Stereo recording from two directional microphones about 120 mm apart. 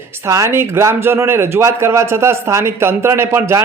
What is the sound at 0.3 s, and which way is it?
A man's voice, 25° right (ahead or behind).